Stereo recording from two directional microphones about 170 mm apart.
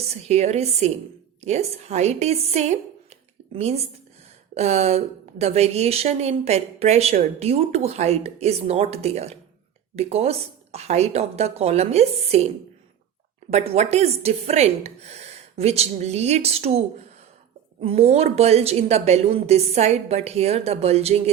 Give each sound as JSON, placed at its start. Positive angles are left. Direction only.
{"t": 0.1, "sound": "speech", "side_deg": -40}
{"t": 13.5, "sound": "speech", "side_deg": -40}